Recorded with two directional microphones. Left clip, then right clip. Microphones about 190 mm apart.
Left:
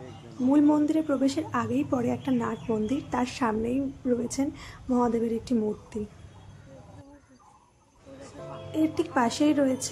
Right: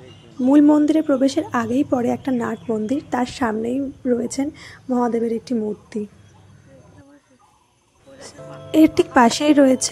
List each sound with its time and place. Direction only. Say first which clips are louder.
0.5 s a woman's voice: right 8 dB; 35° right (ahead or behind); by 5.9 s 15° right (ahead or behind)
8.7 s a woman's voice: right 12 dB; 50° right (ahead or behind)